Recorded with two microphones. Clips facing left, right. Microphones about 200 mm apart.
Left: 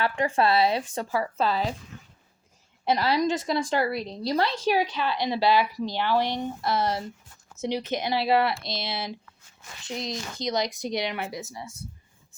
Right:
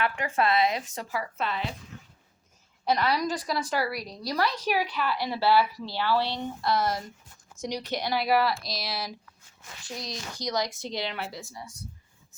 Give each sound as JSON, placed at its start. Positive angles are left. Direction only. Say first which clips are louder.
{"t": 0.0, "sound": "speech", "louder": "left 3 dB", "side_deg": 30}
{"t": 2.8, "sound": "a woman's voice", "louder": "left 3 dB", "side_deg": 25}